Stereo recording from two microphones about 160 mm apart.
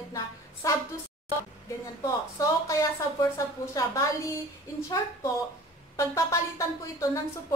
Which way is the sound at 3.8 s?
20° left (ahead or behind).